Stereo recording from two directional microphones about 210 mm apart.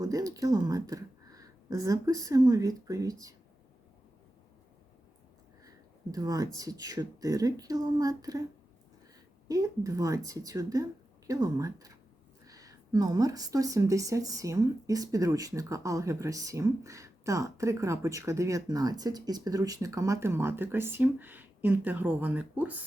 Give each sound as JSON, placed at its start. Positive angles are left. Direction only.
{"t": 0.0, "sound": "speech", "side_deg": -15}
{"t": 5.6, "sound": "speech", "side_deg": -15}
{"t": 9.5, "sound": "speech", "side_deg": -15}